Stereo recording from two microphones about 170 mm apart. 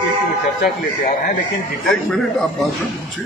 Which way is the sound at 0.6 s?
55° left (ahead or behind).